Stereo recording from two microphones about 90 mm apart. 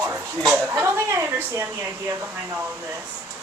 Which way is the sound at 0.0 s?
35° right (ahead or behind).